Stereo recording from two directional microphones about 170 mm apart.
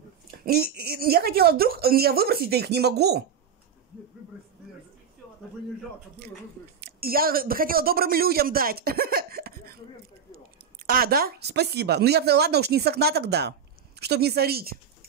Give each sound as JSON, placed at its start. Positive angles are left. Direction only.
{"t": 0.5, "sound": "speech", "side_deg": -65}
{"t": 6.8, "sound": "speech", "side_deg": -65}
{"t": 10.9, "sound": "speech", "side_deg": -60}